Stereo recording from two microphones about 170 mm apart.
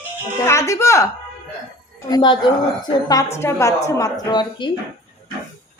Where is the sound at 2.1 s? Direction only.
25° left (ahead or behind).